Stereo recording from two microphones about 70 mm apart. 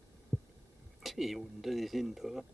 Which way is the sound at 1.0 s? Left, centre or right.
Centre.